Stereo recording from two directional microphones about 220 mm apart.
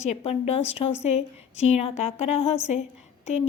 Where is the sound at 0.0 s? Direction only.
30° left (ahead or behind).